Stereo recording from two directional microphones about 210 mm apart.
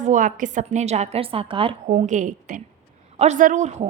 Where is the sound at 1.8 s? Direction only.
35° right (ahead or behind).